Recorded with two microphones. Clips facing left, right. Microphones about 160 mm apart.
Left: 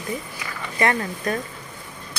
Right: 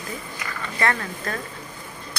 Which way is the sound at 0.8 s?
20° left (ahead or behind).